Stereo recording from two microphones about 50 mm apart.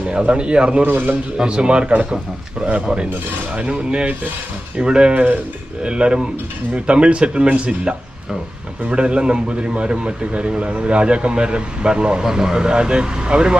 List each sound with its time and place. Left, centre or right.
0.1 s a man's voice: right
0.9 s a man's voice: right
1.4 s a man's voice: centre